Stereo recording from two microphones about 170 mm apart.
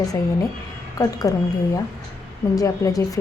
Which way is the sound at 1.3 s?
20° left (ahead or behind).